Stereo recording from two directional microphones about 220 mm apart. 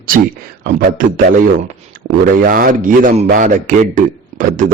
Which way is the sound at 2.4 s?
40° right (ahead or behind).